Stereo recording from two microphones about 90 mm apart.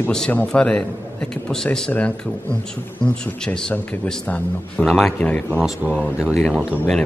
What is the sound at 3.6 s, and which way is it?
Speech, 10° left (ahead or behind).